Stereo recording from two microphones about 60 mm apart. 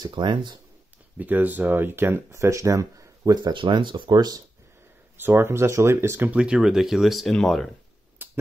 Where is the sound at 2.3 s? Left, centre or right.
Right.